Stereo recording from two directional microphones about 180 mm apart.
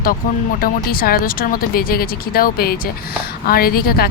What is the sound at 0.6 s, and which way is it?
A woman's voice, 55° left (ahead or behind).